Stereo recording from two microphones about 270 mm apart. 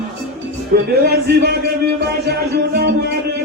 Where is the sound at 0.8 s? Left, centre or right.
Right.